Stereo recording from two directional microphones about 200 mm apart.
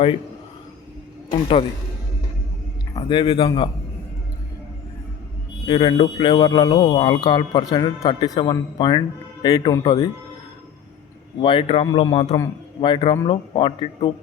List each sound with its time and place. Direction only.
1.3 s speech: 25° left (ahead or behind)
2.9 s speech: 25° left (ahead or behind)
5.6 s speech: 25° left (ahead or behind)
11.3 s speech: 25° left (ahead or behind)